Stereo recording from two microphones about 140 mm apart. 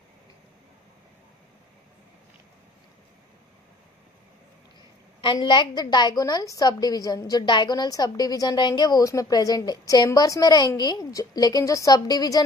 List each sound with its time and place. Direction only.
5.2 s a woman's voice: 35° left (ahead or behind)